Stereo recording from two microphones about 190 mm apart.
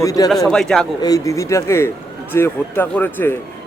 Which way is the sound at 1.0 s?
15° left (ahead or behind).